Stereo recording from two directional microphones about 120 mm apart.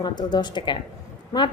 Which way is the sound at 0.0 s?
35° left (ahead or behind).